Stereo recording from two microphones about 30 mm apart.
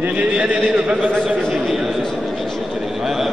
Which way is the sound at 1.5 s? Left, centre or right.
Centre.